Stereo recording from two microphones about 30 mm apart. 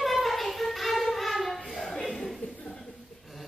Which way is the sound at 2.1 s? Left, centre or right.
Centre.